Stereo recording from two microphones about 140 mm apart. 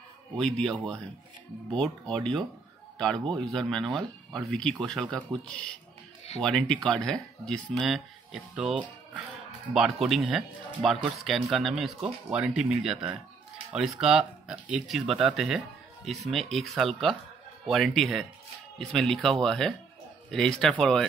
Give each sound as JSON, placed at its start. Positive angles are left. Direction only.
{"t": 0.4, "sound": "speech", "side_deg": 5}